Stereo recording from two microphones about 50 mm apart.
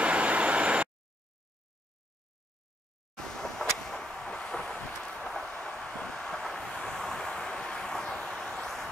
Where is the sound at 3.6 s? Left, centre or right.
Centre.